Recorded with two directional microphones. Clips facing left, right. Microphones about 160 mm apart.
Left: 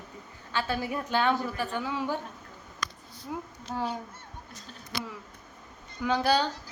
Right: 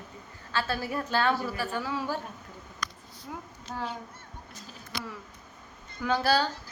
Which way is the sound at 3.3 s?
15° left (ahead or behind).